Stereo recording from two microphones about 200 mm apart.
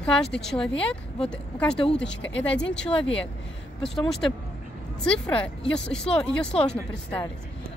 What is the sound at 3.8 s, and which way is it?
Speech, centre (ahead or behind).